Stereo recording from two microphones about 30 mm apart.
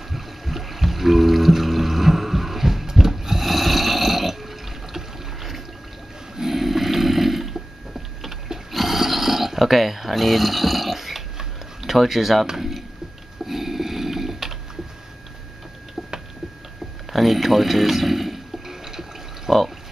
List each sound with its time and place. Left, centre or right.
0.1 s music: centre
6.3 s snoring: centre
8.7 s a sound: centre
11.8 s speech: centre
12.5 s a sound: centre
17.1 s speech: centre
18.9 s water: centre